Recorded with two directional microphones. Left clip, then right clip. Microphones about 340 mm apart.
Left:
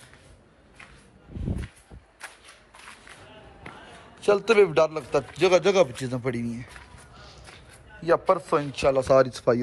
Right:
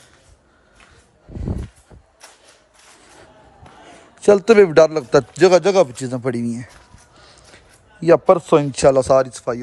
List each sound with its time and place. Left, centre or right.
4.2 s a man's voice: right; by 9.6 s centre